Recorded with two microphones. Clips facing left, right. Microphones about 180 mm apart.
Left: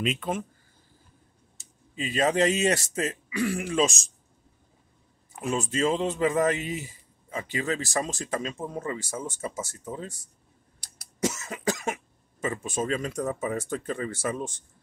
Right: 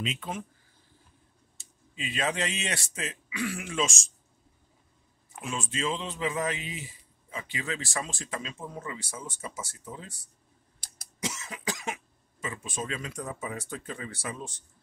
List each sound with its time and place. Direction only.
0.0 s a man's voice: 55° left (ahead or behind)
2.0 s speech: 40° left (ahead or behind)
5.4 s a man's voice: 40° left (ahead or behind)
11.2 s speech: 45° left (ahead or behind)